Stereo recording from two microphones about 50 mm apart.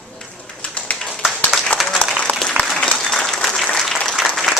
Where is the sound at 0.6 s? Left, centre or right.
Left.